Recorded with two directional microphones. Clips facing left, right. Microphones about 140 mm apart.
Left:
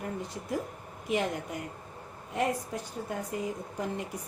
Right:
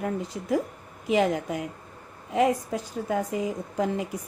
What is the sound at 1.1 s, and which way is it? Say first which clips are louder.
A woman's voice: right 7 dB; 90° right.